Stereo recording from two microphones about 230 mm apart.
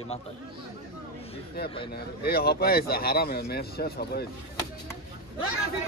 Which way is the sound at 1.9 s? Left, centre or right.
Left.